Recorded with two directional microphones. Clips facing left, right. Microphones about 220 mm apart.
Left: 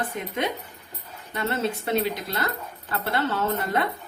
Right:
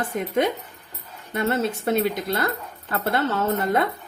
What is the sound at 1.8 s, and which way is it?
Speech, 50° right (ahead or behind).